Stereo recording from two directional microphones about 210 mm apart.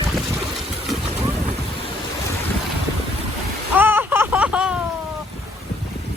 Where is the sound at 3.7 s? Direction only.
10° right (ahead or behind).